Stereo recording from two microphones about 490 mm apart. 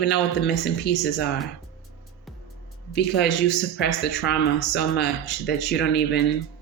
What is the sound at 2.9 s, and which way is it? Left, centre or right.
Speech, centre.